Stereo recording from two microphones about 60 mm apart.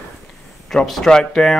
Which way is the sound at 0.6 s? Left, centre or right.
Centre.